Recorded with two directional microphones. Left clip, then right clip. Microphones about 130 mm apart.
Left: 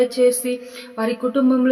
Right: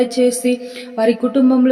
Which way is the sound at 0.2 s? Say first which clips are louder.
Right 1 dB; 30° right (ahead or behind).